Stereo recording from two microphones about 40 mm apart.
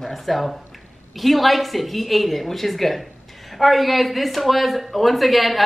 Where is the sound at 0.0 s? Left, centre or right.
Centre.